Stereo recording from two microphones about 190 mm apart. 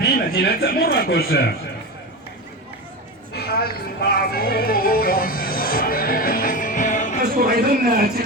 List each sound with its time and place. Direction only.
0.0 s a man's voice: 55° left (ahead or behind)
3.3 s music: 55° left (ahead or behind)
7.3 s a man's voice: 50° right (ahead or behind)